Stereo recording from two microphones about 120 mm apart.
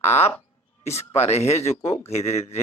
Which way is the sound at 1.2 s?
60° left (ahead or behind).